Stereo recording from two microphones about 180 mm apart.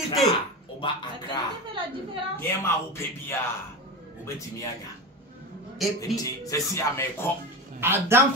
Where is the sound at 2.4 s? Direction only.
10° left (ahead or behind).